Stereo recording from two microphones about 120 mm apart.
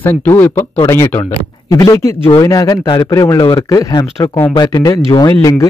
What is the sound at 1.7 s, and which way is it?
Speech, 25° left (ahead or behind).